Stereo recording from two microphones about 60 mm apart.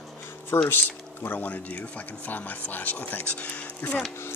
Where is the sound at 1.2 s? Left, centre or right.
Left.